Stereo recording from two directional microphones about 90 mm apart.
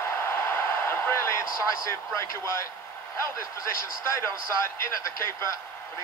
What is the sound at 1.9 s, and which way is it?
A man's voice, 30° left (ahead or behind).